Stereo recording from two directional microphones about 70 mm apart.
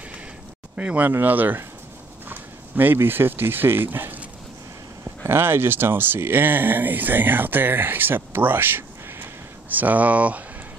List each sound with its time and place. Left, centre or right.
0.7 s speech: right
5.2 s speech: right